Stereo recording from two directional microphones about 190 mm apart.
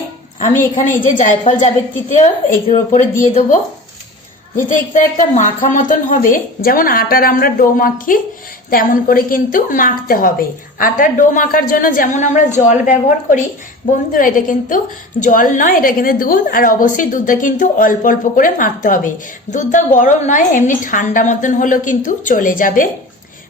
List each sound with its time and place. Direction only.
0.6 s a woman's voice: 40° left (ahead or behind)